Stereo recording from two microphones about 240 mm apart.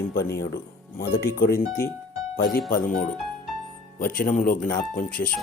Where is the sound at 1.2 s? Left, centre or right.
Left.